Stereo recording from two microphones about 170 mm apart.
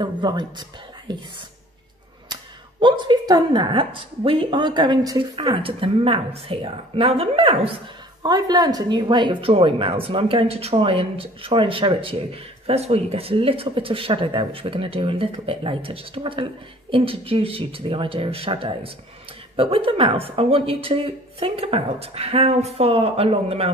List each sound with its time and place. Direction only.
0.0 s speech: 25° right (ahead or behind)
2.8 s a woman's voice: 25° right (ahead or behind)